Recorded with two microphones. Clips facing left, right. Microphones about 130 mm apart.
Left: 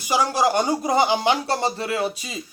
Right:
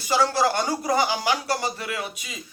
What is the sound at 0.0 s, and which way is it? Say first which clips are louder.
Speech: left 1 dB; 15° left (ahead or behind).